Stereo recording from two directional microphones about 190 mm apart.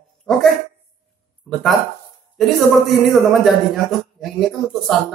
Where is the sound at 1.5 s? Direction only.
Centre (ahead or behind).